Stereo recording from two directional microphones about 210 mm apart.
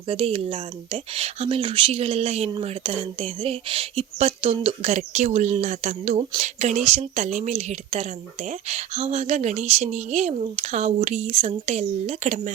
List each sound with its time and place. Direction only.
0.1 s speech: 25° right (ahead or behind)